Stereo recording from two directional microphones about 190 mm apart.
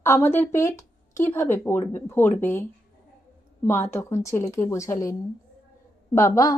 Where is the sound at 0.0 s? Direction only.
15° left (ahead or behind).